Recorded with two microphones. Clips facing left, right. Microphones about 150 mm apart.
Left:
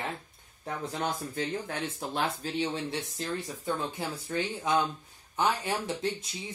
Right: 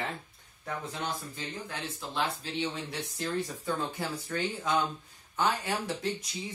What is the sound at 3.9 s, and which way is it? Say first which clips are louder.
Speech: left 1 dB; 20° left (ahead or behind).